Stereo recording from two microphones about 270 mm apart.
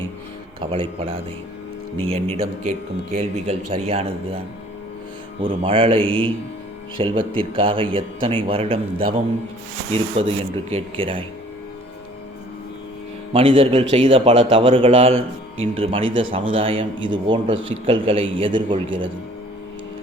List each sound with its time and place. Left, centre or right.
0.6 s speech: centre
13.3 s speech: centre